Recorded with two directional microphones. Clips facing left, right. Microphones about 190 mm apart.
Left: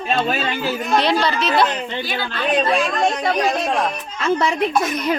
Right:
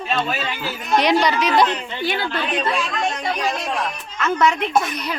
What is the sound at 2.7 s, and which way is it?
Speech, 40° left (ahead or behind).